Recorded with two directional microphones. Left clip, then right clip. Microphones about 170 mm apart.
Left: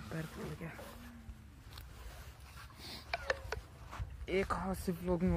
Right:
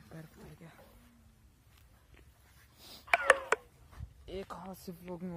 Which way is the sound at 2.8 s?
60° right (ahead or behind).